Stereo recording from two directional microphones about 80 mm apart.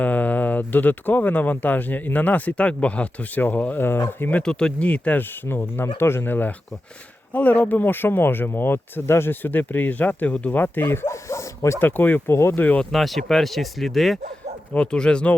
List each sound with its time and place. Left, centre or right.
0.0 s speech: centre
4.4 s speech: centre
5.5 s speech: left
11.8 s speech: left
12.3 s speech: left
12.5 s speech: centre
12.9 s speech: centre
14.7 s speech: centre